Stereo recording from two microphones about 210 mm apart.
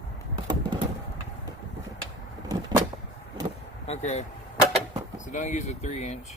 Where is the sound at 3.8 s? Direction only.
30° left (ahead or behind).